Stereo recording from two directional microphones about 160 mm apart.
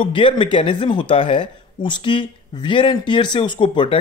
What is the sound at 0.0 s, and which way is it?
Speech, 30° left (ahead or behind).